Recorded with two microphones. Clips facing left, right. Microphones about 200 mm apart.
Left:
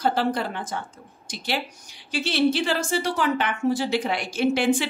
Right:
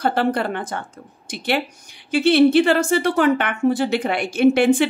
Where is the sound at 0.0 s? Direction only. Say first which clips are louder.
Right 4 dB; 60° right (ahead or behind).